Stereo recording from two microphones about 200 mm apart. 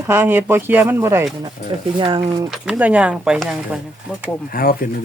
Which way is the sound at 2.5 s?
5° right (ahead or behind).